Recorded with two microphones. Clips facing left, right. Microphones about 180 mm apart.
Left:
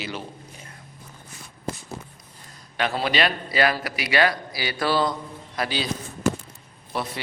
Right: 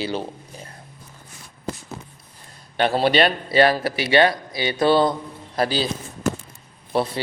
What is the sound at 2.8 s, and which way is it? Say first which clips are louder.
A man's voice: right 6 dB; 30° right (ahead or behind).